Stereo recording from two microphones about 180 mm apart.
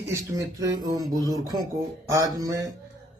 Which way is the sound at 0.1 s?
20° right (ahead or behind).